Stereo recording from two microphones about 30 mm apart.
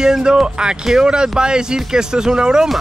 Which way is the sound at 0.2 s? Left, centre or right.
Right.